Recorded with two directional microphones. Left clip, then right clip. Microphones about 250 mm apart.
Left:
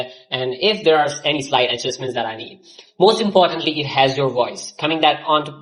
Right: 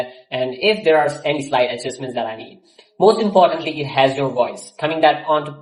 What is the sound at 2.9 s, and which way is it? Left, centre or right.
Speech, centre.